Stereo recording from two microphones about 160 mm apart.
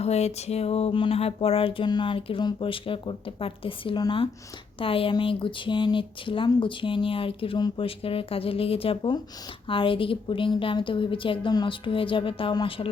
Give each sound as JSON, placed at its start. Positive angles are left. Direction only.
{"t": 0.0, "sound": "speech", "side_deg": 45}